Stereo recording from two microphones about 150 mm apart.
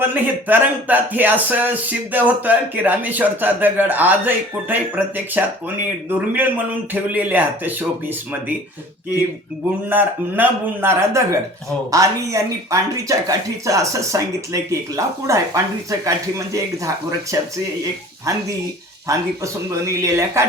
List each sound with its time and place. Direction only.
0.0 s speech: 10° right (ahead or behind)
9.9 s speech: 10° right (ahead or behind)
20.0 s speech: 20° right (ahead or behind)